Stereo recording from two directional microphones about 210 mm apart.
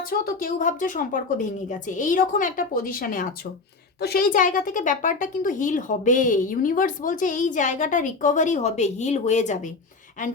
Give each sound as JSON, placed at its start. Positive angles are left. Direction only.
{"t": 0.0, "sound": "speech", "side_deg": 45}